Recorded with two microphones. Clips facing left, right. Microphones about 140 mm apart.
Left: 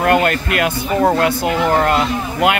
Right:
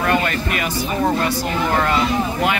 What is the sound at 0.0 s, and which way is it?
Speech, 60° left (ahead or behind).